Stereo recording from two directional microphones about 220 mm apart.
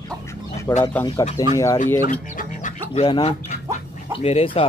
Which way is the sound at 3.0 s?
25° left (ahead or behind).